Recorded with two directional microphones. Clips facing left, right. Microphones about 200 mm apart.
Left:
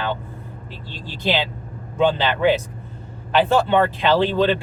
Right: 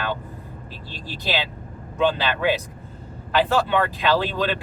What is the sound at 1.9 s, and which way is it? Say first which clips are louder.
Speech: left 3 dB; 25° left (ahead or behind).